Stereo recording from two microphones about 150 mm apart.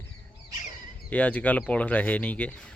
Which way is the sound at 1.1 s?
10° left (ahead or behind).